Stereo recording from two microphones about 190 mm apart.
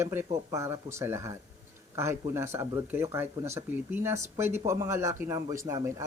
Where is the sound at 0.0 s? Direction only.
15° right (ahead or behind).